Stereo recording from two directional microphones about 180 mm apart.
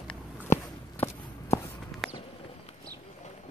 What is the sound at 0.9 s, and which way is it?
Walk, 15° left (ahead or behind).